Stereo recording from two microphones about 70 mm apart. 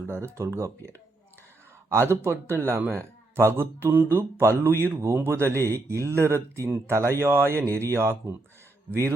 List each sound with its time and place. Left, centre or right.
0.1 s a man's voice: right